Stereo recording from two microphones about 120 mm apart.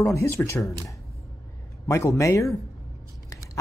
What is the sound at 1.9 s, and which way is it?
Speech, 25° left (ahead or behind).